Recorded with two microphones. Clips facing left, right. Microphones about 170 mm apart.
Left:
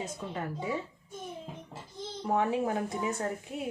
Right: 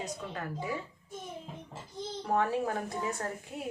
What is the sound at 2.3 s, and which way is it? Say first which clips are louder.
Speech: left 1 dB; 20° left (ahead or behind).